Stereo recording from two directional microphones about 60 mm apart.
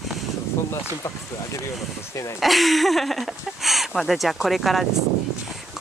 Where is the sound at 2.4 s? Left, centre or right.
Centre.